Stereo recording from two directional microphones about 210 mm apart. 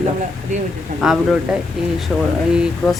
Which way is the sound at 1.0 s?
Centre (ahead or behind).